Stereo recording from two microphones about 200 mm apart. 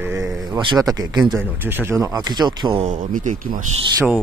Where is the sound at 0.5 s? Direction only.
20° right (ahead or behind).